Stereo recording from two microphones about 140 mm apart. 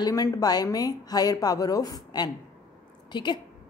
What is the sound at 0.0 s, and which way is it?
A woman's voice, 25° left (ahead or behind).